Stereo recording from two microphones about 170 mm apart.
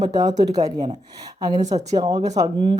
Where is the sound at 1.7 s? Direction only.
25° right (ahead or behind).